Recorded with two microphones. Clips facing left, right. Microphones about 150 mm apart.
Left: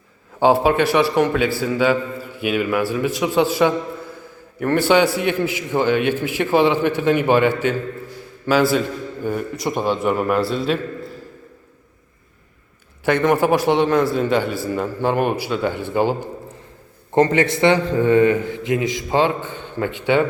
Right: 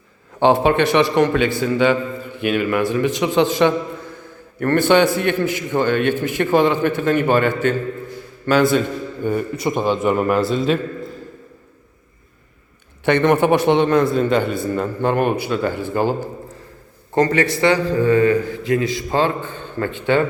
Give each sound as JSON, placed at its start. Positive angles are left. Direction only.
{"t": 0.3, "sound": "a man's voice", "side_deg": 5}
{"t": 13.1, "sound": "a man's voice", "side_deg": 5}
{"t": 17.2, "sound": "a man's voice", "side_deg": 25}